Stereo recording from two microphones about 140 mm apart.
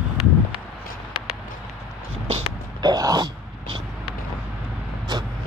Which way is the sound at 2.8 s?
30° right (ahead or behind).